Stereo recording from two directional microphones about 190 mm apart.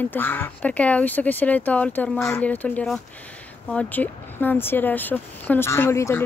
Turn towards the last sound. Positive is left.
turn(degrees=15)  # may be behind; listen again after turning